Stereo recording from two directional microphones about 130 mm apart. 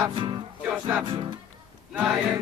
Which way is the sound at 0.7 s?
10° right (ahead or behind).